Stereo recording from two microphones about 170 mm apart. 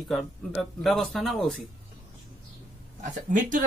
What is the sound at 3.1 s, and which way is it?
Speech, 50° right (ahead or behind).